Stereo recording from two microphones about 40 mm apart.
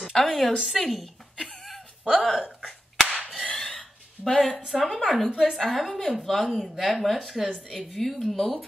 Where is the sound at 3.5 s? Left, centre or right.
Centre.